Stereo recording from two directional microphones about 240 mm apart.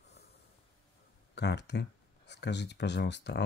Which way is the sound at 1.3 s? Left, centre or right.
Left.